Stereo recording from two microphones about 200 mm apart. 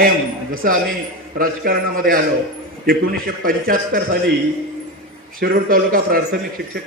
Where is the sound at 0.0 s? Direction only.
45° right (ahead or behind).